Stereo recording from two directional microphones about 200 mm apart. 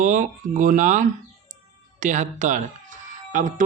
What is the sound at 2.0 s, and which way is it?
Music, 40° right (ahead or behind).